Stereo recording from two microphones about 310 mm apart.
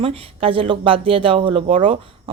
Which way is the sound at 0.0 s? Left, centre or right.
Centre.